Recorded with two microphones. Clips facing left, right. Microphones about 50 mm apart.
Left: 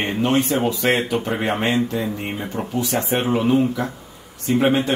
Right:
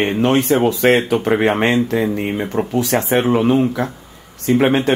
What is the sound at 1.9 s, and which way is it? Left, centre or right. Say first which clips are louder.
Speech: right 6 dB; right.